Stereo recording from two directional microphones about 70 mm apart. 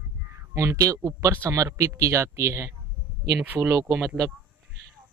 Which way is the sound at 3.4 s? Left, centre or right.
Right.